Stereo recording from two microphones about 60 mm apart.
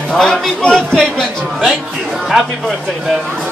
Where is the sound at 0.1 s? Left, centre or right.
Centre.